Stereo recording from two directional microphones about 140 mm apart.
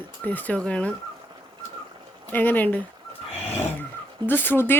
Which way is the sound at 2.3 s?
10° left (ahead or behind).